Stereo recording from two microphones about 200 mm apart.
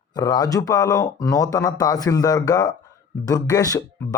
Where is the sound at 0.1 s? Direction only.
20° left (ahead or behind).